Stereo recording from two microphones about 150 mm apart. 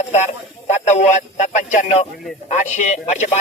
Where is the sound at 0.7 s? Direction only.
50° left (ahead or behind).